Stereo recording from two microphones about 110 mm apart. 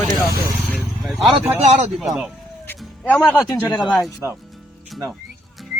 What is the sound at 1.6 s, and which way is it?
Speech, 90° right.